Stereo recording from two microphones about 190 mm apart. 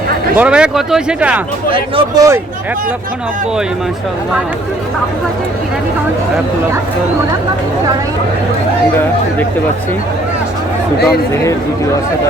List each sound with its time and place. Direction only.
0.3 s speech: 5° right (ahead or behind)
1.7 s speech: 25° right (ahead or behind)